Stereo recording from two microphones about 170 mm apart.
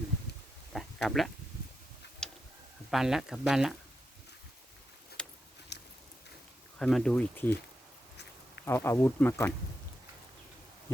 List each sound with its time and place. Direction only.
0.7 s a sound: centre (ahead or behind)
2.2 s tick-tock: 5° left (ahead or behind)
2.9 s speech: centre (ahead or behind)
5.2 s tick-tock: 5° left (ahead or behind)
5.7 s a sound: 85° left
6.7 s speech: 5° left (ahead or behind)
8.6 s speech: 15° left (ahead or behind)